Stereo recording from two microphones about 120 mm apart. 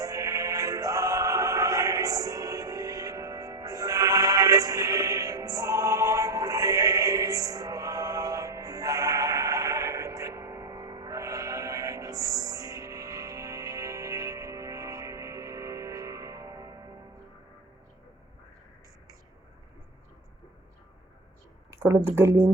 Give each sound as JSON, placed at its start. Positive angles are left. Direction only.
{"t": 0.0, "sound": "music", "side_deg": -30}
{"t": 21.7, "sound": "speech", "side_deg": -20}